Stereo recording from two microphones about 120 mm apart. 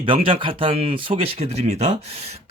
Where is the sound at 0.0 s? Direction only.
45° right (ahead or behind).